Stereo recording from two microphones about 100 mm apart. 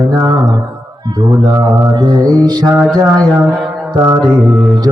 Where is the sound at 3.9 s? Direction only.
40° right (ahead or behind).